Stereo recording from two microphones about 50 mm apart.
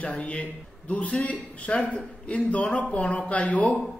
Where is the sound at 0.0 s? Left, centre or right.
Left.